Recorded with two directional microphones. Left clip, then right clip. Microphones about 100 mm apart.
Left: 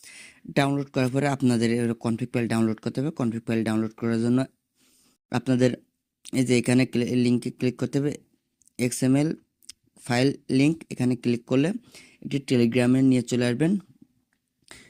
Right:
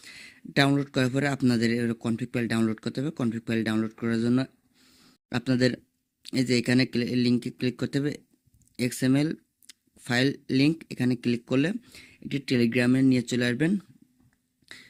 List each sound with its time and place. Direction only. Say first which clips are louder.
0.0 s speech: even; 20° left (ahead or behind)
5.3 s speech: left 2 dB; 15° left (ahead or behind)
14.7 s finger snapping: right 2 dB; 25° left (ahead or behind)